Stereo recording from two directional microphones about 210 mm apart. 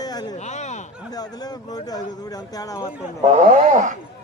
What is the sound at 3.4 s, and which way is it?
Speech, 35° right (ahead or behind).